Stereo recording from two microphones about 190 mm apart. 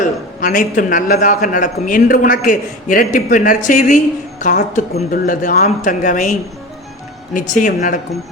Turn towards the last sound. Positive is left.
turn(degrees=45)  # may be behind; listen again after turning